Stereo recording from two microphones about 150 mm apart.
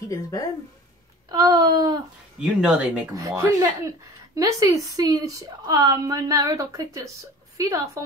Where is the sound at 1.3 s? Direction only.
25° right (ahead or behind).